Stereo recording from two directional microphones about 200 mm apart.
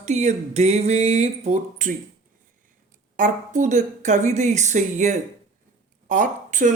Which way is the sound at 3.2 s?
40° right (ahead or behind).